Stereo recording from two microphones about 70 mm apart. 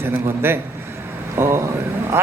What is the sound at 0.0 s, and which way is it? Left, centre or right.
A man's voice, right.